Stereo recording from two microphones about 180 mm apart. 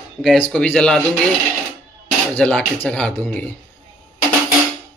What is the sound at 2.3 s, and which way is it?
Speech, 5° left (ahead or behind).